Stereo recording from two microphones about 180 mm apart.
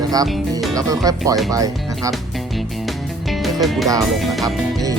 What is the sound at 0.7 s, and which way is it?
Speech, 20° right (ahead or behind).